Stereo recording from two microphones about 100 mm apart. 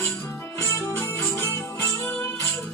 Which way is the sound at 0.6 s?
25° left (ahead or behind).